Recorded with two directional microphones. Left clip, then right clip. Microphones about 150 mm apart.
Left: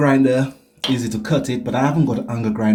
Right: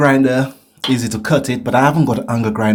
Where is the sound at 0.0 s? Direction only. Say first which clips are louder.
Right 3 dB; 45° right (ahead or behind).